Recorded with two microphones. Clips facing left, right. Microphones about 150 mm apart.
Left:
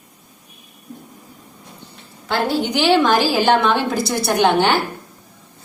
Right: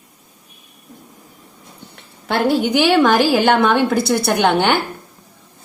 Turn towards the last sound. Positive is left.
turn(degrees=-60)  # may be behind; listen again after turning